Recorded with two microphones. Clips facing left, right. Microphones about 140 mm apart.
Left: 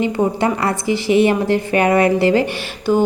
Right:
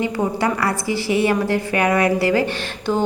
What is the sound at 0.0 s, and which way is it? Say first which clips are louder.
A woman's voice: left 3 dB; 25° left (ahead or behind).